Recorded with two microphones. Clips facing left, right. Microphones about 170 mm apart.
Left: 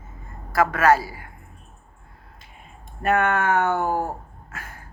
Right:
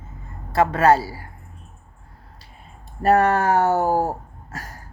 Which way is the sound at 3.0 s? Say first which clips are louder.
Right 4 dB; 35° right (ahead or behind).